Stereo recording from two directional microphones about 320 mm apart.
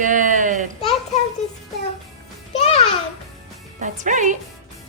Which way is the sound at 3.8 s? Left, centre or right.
Right.